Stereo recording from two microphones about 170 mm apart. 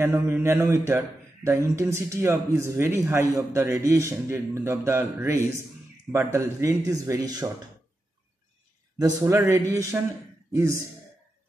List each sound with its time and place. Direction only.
0.0 s a man's voice: 15° right (ahead or behind)
8.9 s a man's voice: 20° right (ahead or behind)